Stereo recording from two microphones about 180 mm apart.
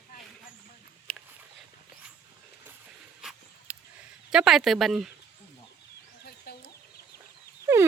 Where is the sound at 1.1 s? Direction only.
5° left (ahead or behind).